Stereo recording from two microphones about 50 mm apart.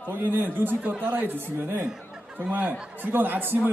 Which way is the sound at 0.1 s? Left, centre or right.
Right.